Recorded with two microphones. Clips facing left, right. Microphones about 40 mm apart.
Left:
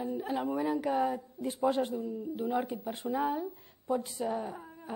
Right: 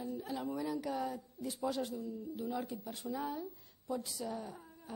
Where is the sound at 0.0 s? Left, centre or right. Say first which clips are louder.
Left 7 dB; left.